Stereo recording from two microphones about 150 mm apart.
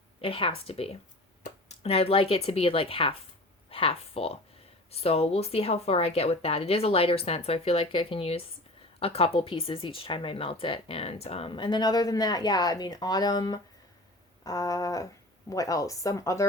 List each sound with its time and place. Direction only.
0.2 s speech: 35° left (ahead or behind); by 16.5 s 20° left (ahead or behind)